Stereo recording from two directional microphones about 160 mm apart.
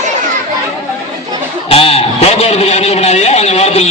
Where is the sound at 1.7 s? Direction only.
40° left (ahead or behind).